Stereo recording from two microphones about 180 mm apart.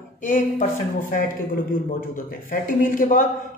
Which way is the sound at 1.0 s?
50° left (ahead or behind).